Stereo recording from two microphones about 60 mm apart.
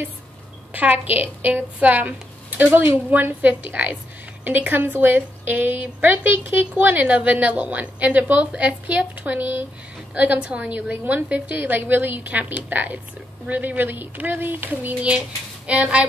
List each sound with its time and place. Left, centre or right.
0.7 s a woman's voice: right
2.7 s a woman's voice: right
15.0 s a woman's voice: right